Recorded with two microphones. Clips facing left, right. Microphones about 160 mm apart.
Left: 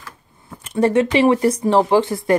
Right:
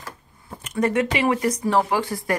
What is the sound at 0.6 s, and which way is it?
Speech, 30° left (ahead or behind).